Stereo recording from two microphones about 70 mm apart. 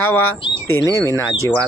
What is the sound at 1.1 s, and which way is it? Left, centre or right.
Speech, left.